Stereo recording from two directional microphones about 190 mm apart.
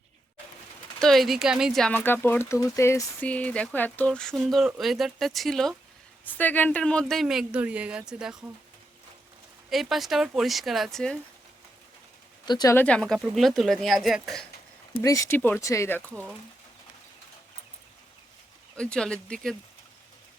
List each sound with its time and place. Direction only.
0.9 s speech: centre (ahead or behind)
9.6 s speech: centre (ahead or behind)
12.5 s speech: 20° left (ahead or behind)
12.7 s speech: 5° left (ahead or behind)
15.0 s speech: 10° left (ahead or behind)
18.8 s speech: 5° left (ahead or behind)